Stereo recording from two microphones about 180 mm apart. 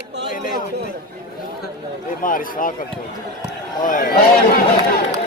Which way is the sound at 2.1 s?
50° left (ahead or behind).